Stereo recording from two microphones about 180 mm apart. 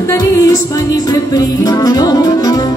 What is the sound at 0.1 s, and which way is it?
Music, 20° left (ahead or behind).